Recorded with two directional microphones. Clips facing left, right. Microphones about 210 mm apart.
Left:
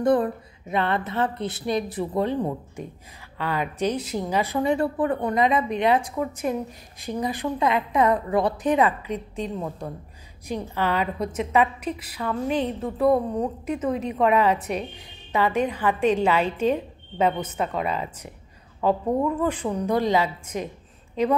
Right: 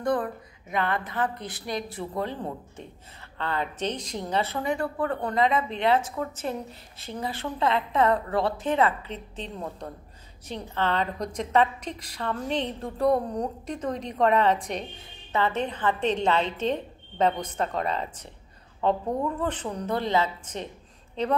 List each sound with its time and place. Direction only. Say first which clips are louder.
0.0 s a woman's voice: left 6 dB; 25° left (ahead or behind)